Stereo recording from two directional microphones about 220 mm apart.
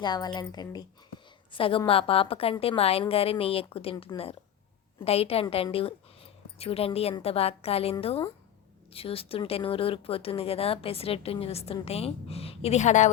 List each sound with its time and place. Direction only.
0.0 s speech: 20° left (ahead or behind)